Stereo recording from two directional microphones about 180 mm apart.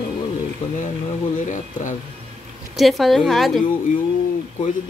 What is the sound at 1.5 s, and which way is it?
Speech, 45° left (ahead or behind).